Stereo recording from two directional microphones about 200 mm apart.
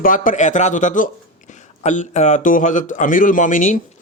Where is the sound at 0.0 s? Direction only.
40° left (ahead or behind).